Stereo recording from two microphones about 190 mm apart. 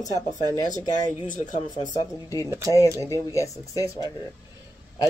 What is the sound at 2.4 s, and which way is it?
Speech, 15° right (ahead or behind).